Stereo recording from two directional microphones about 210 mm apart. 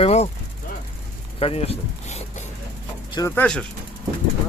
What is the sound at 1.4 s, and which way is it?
Speech, 30° left (ahead or behind).